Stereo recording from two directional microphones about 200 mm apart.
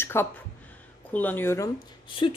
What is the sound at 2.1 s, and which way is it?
Speech, 25° left (ahead or behind).